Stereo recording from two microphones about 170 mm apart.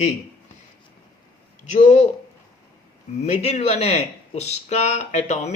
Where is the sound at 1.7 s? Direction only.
45° left (ahead or behind).